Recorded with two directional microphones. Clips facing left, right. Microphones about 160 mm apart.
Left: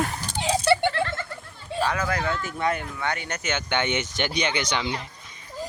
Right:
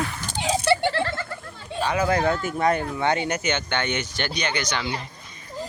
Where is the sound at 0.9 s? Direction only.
35° right (ahead or behind).